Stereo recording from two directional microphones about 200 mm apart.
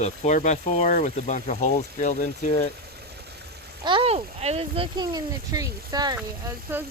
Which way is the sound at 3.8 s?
25° right (ahead or behind).